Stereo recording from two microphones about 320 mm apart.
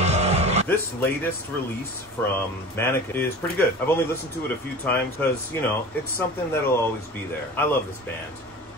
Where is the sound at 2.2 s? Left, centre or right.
Centre.